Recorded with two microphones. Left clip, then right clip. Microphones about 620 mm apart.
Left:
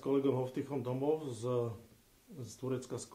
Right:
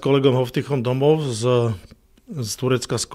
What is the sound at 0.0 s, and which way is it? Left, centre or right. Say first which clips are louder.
Speech: right 15 dB; right.